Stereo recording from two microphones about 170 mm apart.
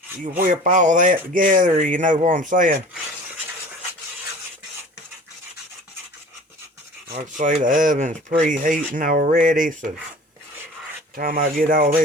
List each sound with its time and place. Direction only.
0.2 s speech: 50° right (ahead or behind)
7.1 s speech: 50° right (ahead or behind)
11.1 s speech: 55° right (ahead or behind)